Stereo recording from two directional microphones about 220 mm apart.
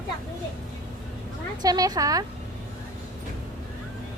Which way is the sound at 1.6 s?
15° right (ahead or behind).